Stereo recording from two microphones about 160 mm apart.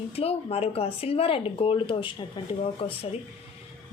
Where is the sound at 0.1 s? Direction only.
40° left (ahead or behind).